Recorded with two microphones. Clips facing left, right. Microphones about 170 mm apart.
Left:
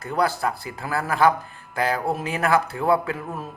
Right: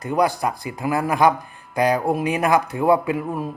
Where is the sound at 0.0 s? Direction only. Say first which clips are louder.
Right 3 dB; 15° right (ahead or behind).